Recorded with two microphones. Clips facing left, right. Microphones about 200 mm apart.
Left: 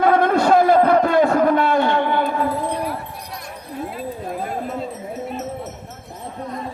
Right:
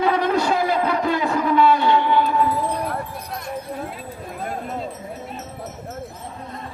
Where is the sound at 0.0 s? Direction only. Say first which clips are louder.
Left 4 dB; 50° left (ahead or behind).